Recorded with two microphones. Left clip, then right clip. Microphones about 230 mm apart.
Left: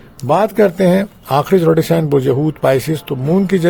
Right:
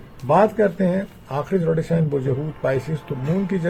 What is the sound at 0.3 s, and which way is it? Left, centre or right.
A man's voice, left.